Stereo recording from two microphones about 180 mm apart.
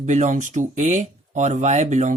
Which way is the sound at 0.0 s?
40° right (ahead or behind).